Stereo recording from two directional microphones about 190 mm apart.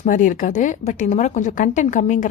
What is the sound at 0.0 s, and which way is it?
Speech, 45° left (ahead or behind).